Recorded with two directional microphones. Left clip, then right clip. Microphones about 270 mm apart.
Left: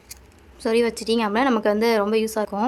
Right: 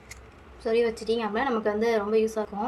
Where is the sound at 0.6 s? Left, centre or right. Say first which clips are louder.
Left 4 dB; left.